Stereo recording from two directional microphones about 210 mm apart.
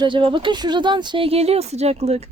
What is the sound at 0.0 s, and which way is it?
Speech, 25° right (ahead or behind).